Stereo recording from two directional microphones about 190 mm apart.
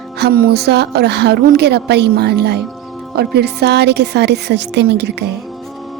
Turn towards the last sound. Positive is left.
turn(degrees=-60)  # may be behind; listen again after turning